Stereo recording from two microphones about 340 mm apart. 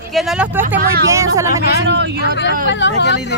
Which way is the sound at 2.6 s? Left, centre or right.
Left.